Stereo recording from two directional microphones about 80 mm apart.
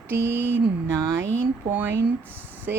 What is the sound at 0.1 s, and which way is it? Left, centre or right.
Speech, right.